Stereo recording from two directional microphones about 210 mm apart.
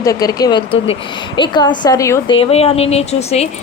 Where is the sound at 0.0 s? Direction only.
15° left (ahead or behind).